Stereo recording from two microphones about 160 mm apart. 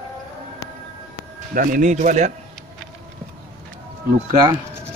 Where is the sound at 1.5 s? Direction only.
60° right (ahead or behind).